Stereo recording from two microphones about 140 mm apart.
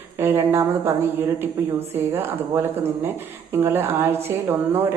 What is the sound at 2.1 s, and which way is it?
Speech, 15° right (ahead or behind).